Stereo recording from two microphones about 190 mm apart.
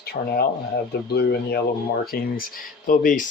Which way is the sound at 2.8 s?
45° left (ahead or behind).